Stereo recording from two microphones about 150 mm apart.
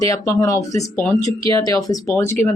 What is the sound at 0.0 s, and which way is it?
A woman's voice, 20° left (ahead or behind).